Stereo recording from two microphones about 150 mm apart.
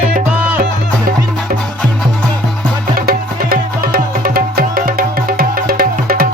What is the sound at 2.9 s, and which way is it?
Music, 80° right.